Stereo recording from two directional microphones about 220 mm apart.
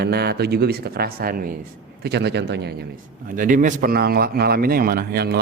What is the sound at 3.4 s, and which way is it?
A man's voice, 35° right (ahead or behind).